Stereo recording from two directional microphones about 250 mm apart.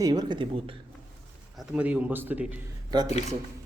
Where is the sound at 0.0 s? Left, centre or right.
Centre.